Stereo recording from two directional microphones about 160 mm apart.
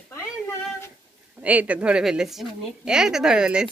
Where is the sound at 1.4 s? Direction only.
10° right (ahead or behind).